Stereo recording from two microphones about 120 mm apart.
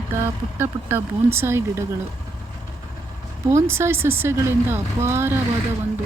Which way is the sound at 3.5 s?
25° right (ahead or behind).